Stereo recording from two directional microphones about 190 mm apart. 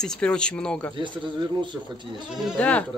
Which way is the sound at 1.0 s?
25° right (ahead or behind).